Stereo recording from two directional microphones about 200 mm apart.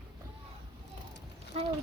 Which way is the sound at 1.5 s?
30° right (ahead or behind).